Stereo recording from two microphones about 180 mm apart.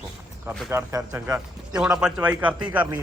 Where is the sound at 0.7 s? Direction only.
15° right (ahead or behind).